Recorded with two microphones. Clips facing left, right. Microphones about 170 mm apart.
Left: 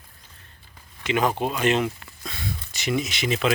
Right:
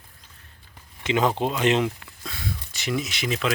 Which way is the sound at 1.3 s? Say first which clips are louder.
Right 1 dB; 10° left (ahead or behind).